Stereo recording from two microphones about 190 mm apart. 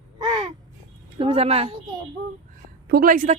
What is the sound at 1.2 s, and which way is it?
Speech, 30° right (ahead or behind).